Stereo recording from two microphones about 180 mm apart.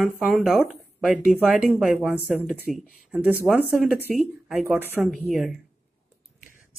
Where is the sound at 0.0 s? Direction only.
5° right (ahead or behind).